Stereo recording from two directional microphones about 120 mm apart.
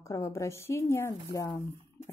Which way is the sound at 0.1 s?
25° left (ahead or behind).